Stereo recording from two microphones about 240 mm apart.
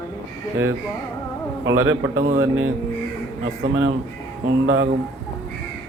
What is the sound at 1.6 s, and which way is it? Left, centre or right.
Speech, right.